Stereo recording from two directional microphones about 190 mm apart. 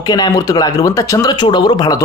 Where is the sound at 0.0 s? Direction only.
20° left (ahead or behind).